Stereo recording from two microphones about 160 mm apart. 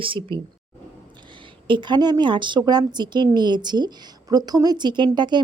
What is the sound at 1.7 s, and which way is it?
Speech, 30° right (ahead or behind).